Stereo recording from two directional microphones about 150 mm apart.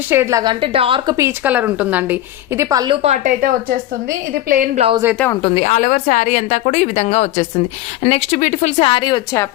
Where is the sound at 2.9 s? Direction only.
50° right (ahead or behind).